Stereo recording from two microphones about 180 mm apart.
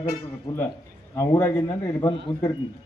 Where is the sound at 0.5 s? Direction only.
25° left (ahead or behind).